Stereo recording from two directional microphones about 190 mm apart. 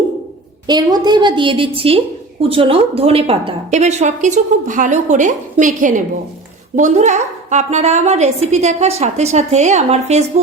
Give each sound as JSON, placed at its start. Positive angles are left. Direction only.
{"t": 0.7, "sound": "a woman's voice", "side_deg": -20}